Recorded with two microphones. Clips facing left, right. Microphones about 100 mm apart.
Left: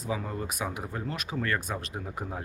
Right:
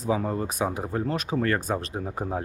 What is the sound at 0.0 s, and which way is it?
Speech, 35° right (ahead or behind).